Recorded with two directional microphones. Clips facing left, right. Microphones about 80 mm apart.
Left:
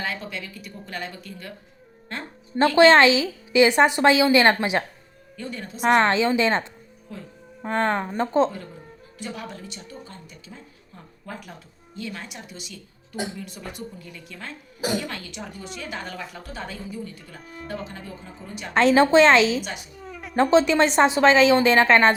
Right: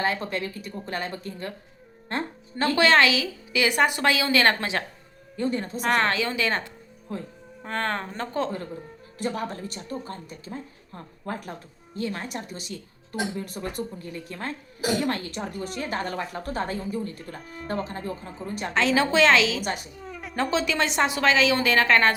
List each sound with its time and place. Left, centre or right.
0.0 s speech: right
2.7 s a woman's voice: left
5.4 s speech: right
5.8 s a woman's voice: left
9.1 s a woman's voice: right
17.4 s speech: centre
17.7 s speech: right
18.7 s a woman's voice: left
20.0 s a sound: centre
20.3 s a woman's voice: left